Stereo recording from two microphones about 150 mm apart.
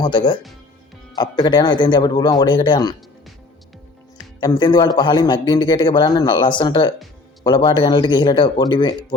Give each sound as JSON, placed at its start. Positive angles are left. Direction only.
{"t": 0.0, "sound": "a man's voice", "side_deg": 30}
{"t": 4.4, "sound": "a man's voice", "side_deg": 30}